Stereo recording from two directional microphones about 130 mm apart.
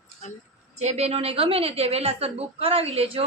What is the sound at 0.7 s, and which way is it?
A woman's voice, 55° right (ahead or behind).